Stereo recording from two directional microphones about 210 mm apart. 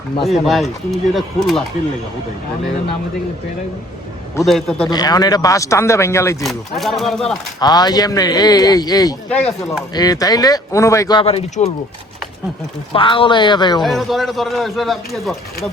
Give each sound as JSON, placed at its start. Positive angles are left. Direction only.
{"t": 0.2, "sound": "a man's voice", "side_deg": 0}
{"t": 4.4, "sound": "a man's voice", "side_deg": 0}
{"t": 4.9, "sound": "speech", "side_deg": 20}
{"t": 6.4, "sound": "a man's voice", "side_deg": 0}
{"t": 7.6, "sound": "speech", "side_deg": 20}
{"t": 9.3, "sound": "a man's voice", "side_deg": 0}
{"t": 9.9, "sound": "speech", "side_deg": 20}
{"t": 12.9, "sound": "speech", "side_deg": 25}
{"t": 13.8, "sound": "a man's voice", "side_deg": 0}